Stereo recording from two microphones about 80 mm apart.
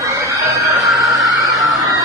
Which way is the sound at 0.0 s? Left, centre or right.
Right.